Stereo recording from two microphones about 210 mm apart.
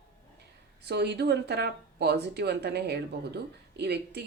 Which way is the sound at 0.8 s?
50° right (ahead or behind).